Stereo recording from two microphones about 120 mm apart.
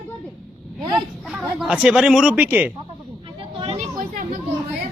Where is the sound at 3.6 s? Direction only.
55° right (ahead or behind).